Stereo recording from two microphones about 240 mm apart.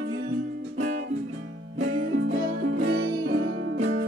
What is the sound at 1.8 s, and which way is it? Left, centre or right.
Music, right.